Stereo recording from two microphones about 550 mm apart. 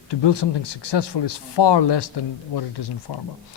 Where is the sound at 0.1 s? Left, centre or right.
Left.